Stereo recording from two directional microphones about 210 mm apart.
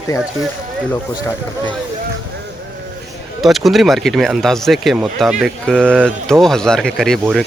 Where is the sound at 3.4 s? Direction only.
Centre (ahead or behind).